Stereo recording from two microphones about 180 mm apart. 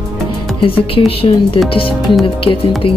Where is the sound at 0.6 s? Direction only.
30° left (ahead or behind).